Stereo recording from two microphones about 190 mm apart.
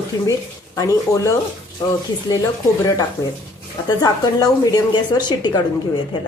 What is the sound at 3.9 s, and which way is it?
A woman's voice, 20° left (ahead or behind).